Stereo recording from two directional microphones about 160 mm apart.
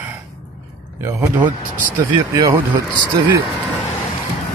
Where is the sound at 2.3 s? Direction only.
15° right (ahead or behind).